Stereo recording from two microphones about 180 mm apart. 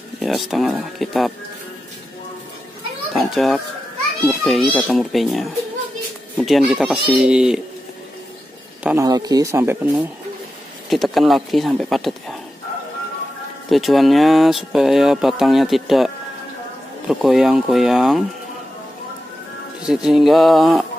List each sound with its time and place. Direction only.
0.2 s speech: centre (ahead or behind)
3.1 s children playing: centre (ahead or behind)
4.3 s speech: centre (ahead or behind)
8.8 s speech: 15° right (ahead or behind)
10.9 s speech: centre (ahead or behind)
13.7 s speech: centre (ahead or behind)
17.1 s speech: centre (ahead or behind)
19.9 s speech: 5° right (ahead or behind)